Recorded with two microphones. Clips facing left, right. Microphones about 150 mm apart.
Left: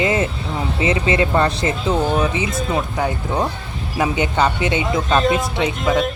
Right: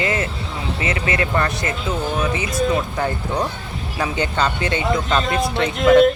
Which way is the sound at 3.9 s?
15° left (ahead or behind).